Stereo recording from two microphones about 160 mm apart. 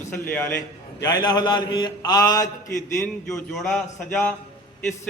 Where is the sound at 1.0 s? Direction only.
25° left (ahead or behind).